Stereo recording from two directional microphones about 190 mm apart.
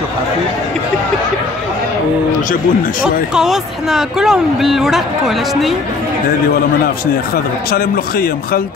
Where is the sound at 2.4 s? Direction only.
45° left (ahead or behind).